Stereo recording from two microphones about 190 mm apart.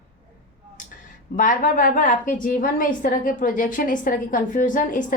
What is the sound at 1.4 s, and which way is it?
A woman's voice, 45° left (ahead or behind).